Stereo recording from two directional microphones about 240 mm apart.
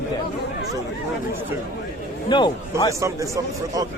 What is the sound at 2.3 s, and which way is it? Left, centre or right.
Speech, centre.